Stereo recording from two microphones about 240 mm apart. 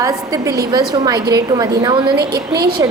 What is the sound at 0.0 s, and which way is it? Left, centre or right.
A woman's voice, centre.